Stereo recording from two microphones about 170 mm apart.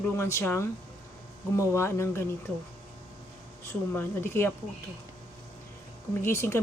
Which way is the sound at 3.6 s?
15° left (ahead or behind).